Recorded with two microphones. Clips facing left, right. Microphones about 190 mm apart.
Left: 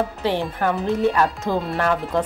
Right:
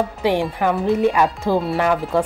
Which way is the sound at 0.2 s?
15° right (ahead or behind).